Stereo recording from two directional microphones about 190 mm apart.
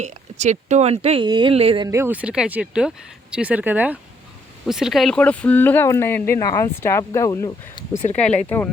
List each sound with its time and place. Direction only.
0.0 s speech: 35° right (ahead or behind); by 7.9 s 20° left (ahead or behind)
8.1 s speech: 5° left (ahead or behind)